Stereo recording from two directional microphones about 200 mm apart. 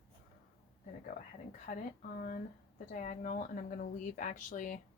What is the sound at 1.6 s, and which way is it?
Speech, 40° left (ahead or behind).